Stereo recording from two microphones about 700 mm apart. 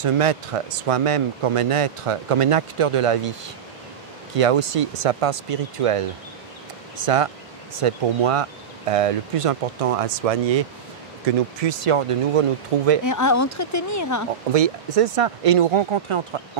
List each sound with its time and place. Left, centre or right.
0.0 s speech: right
4.4 s speech: right
11.6 s speech: right
13.0 s speech: left
14.5 s speech: right